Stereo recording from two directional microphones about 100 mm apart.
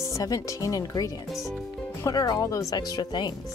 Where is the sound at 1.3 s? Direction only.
Centre (ahead or behind).